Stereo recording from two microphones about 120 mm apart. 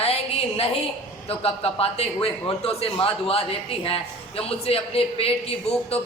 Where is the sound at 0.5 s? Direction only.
55° left (ahead or behind).